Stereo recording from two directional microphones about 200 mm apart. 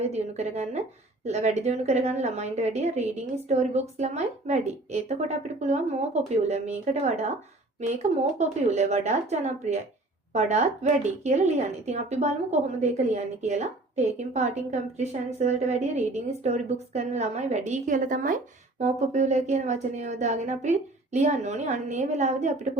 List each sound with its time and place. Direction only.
0.0 s speech: 35° right (ahead or behind)